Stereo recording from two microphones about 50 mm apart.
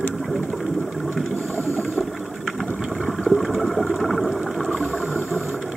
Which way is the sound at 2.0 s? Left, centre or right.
Centre.